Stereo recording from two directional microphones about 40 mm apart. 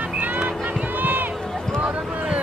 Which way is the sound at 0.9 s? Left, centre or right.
Right.